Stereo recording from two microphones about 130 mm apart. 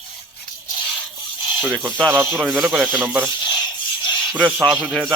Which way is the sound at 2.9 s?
15° right (ahead or behind).